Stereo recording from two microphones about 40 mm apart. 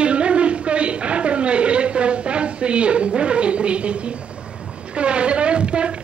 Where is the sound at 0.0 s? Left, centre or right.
Right.